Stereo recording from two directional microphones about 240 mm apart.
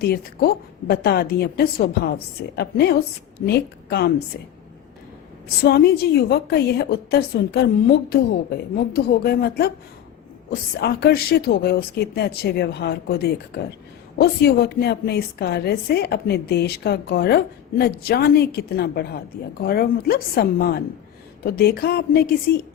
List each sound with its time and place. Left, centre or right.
0.9 s a woman's voice: left
5.6 s a woman's voice: left